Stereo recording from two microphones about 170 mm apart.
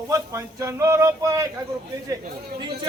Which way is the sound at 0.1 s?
20° right (ahead or behind).